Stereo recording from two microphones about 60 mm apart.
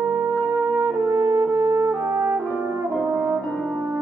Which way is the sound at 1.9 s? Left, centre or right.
Right.